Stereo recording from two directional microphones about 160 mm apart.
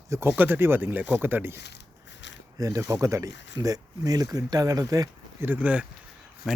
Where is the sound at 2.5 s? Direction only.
20° right (ahead or behind).